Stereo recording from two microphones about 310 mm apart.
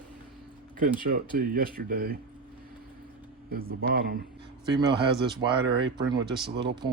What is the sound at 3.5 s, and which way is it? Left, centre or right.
Speech, right.